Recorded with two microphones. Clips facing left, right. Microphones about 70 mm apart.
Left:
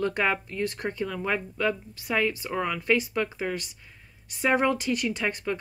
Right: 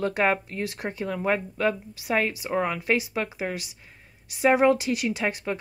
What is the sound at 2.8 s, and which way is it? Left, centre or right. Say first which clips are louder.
Speech: even; centre.